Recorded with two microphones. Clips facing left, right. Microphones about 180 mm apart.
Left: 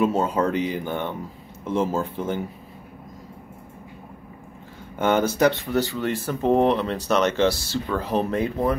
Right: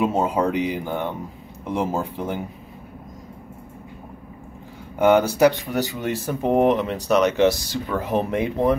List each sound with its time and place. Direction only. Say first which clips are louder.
0.0 s speech: right 1 dB; 15° right (ahead or behind)
4.9 s speech: right 4 dB; 15° right (ahead or behind)